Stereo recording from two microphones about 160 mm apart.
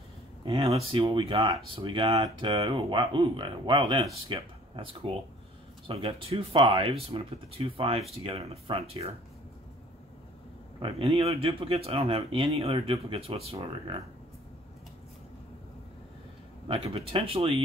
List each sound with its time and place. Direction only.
0.5 s speech: 35° right (ahead or behind)
10.8 s speech: 35° right (ahead or behind)
16.6 s speech: 35° right (ahead or behind)